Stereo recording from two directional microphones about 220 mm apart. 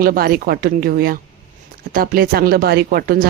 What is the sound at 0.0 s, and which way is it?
Speech, 45° right (ahead or behind).